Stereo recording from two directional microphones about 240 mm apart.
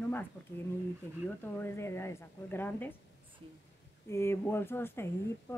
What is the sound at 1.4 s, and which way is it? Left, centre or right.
Speech, centre.